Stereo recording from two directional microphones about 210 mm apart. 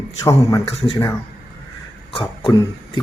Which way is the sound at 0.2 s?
15° left (ahead or behind).